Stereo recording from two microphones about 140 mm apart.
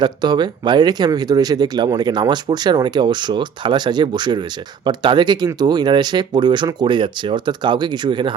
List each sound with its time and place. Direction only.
0.0 s speech: 30° right (ahead or behind)